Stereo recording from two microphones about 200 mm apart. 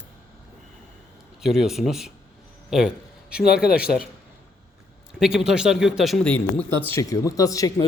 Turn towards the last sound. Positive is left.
turn(degrees=15)  # may be behind; listen again after turning